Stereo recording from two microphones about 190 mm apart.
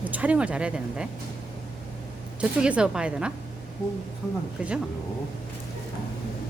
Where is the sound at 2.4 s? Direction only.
5° right (ahead or behind).